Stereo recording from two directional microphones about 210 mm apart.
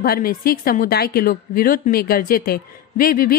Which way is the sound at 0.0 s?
45° left (ahead or behind).